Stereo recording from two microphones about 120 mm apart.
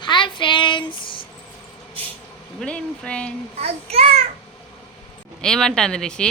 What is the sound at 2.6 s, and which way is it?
Speech, 10° left (ahead or behind).